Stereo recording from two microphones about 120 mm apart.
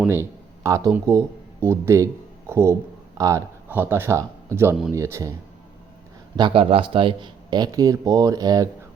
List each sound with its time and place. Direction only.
0.1 s a man's voice: 25° right (ahead or behind)
3.7 s speech: 15° right (ahead or behind)
6.3 s speech: 40° right (ahead or behind)